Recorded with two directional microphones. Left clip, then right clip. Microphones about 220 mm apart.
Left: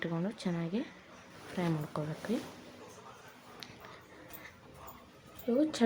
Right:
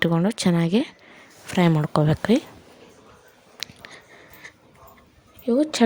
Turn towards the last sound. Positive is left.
turn(degrees=-35)  # may be behind; listen again after turning